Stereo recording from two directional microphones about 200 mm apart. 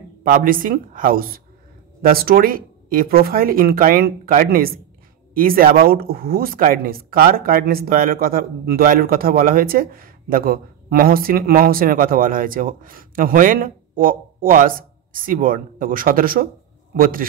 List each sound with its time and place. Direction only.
0.2 s speech: 45° right (ahead or behind)